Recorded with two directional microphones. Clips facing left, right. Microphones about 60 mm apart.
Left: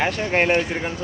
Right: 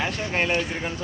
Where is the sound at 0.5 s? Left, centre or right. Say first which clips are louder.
Left 4 dB; left.